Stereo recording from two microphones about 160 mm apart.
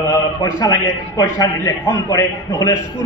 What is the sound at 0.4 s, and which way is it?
A man's voice, 20° left (ahead or behind).